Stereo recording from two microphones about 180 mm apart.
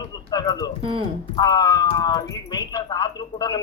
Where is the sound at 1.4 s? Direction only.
20° left (ahead or behind).